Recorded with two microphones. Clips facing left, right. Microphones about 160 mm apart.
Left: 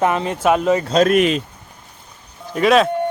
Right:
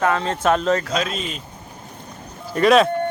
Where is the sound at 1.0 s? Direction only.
70° left (ahead or behind).